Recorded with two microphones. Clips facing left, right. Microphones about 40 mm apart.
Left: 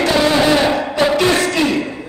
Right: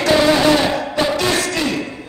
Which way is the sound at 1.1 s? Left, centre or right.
Left.